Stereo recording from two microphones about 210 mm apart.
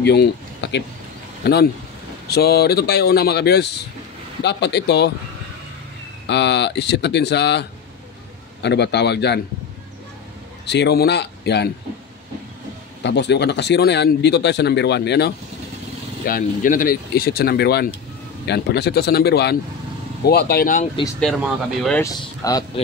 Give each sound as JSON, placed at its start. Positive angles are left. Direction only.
{"t": 0.0, "sound": "a sound", "side_deg": 55}
{"t": 1.4, "sound": "speech", "side_deg": 50}
{"t": 6.2, "sound": "speech", "side_deg": 55}
{"t": 8.6, "sound": "speech", "side_deg": 55}
{"t": 10.7, "sound": "speech", "side_deg": 50}
{"t": 13.0, "sound": "speech", "side_deg": 55}
{"t": 16.3, "sound": "speech", "side_deg": 40}
{"t": 21.2, "sound": "speech", "side_deg": 0}
{"t": 22.0, "sound": "speech", "side_deg": 15}